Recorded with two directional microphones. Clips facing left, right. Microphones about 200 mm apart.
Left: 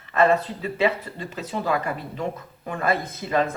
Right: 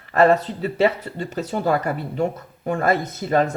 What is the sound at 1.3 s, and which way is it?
Speech, 40° right (ahead or behind).